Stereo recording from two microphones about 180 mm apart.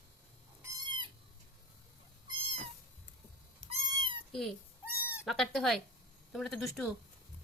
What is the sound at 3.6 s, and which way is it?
Cat, 30° right (ahead or behind).